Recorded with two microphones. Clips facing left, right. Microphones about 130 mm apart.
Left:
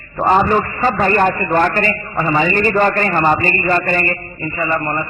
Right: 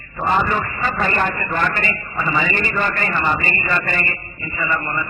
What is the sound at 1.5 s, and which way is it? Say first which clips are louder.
A man's voice: left 7 dB; 40° left (ahead or behind).